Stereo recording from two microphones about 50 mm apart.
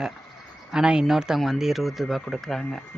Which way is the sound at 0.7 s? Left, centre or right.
Centre.